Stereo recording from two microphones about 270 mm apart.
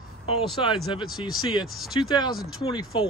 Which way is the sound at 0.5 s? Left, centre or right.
Centre.